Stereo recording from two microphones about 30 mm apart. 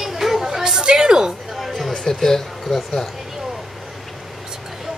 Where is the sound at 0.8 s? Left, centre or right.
Right.